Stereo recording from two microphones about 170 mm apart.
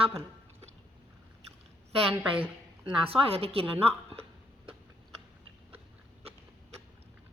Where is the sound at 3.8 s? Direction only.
35° right (ahead or behind).